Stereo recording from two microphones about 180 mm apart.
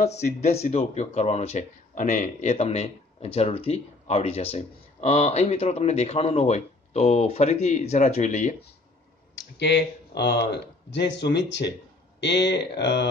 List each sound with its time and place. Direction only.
0.2 s speech: 35° left (ahead or behind)
9.6 s speech: 70° left (ahead or behind)